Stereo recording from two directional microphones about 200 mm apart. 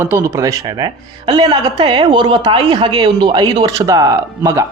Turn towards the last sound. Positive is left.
turn(degrees=-15)  # may be behind; listen again after turning